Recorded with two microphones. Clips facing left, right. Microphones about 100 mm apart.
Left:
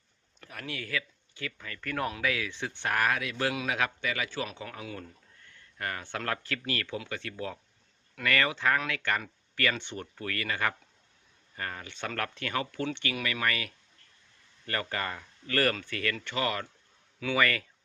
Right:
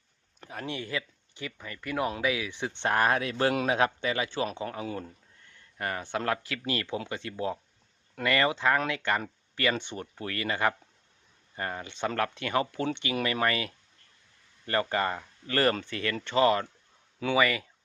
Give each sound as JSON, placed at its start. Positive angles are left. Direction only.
{"t": 0.3, "sound": "speech", "side_deg": -25}
{"t": 5.7, "sound": "speech", "side_deg": -15}
{"t": 17.3, "sound": "speech", "side_deg": -15}